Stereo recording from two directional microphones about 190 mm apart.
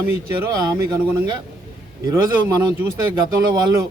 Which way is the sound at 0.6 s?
20° right (ahead or behind).